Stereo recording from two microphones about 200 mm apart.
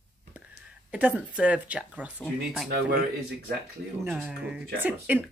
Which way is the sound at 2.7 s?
60° right (ahead or behind).